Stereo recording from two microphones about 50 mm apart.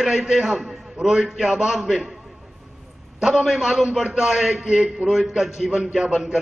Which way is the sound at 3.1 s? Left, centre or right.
Centre.